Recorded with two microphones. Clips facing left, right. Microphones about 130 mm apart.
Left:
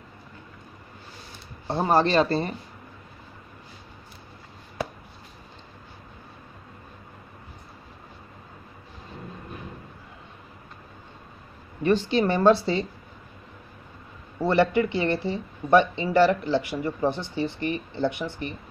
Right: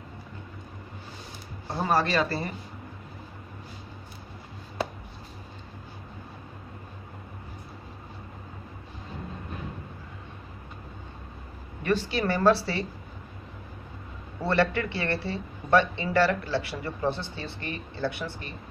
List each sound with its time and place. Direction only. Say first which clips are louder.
1.7 s a woman's voice: left 4 dB; 25° left (ahead or behind)
11.8 s a woman's voice: left 5 dB; 20° left (ahead or behind)
14.4 s speech: left 4 dB; 15° left (ahead or behind)